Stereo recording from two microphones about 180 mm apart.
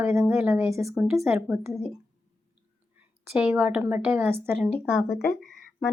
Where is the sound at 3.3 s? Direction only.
5° right (ahead or behind).